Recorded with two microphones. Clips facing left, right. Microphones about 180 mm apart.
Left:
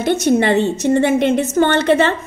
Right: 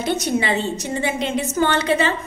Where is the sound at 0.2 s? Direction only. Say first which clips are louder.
Left 7 dB; 55° left (ahead or behind).